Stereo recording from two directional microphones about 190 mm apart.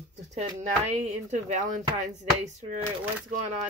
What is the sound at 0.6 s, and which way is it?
Speech, 35° right (ahead or behind).